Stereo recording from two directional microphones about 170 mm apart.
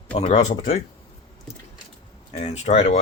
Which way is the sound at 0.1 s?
35° left (ahead or behind).